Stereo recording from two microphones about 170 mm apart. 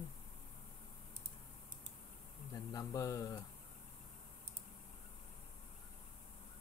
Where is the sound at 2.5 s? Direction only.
20° left (ahead or behind).